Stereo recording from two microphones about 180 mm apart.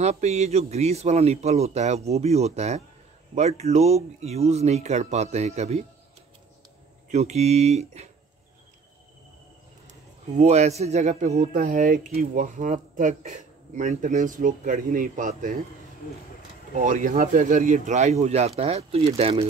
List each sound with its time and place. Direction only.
0.0 s a man's voice: 35° right (ahead or behind)
7.1 s a man's voice: 40° right (ahead or behind)
9.8 s speech: 40° right (ahead or behind)
16.7 s a man's voice: 45° right (ahead or behind); by 19.4 s 30° right (ahead or behind)